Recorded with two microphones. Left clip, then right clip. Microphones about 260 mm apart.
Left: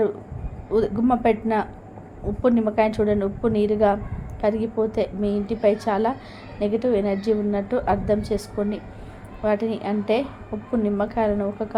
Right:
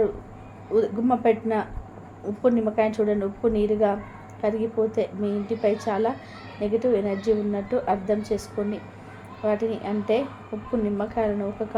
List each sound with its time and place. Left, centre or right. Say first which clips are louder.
0.7 s a woman's voice: left 1 dB; centre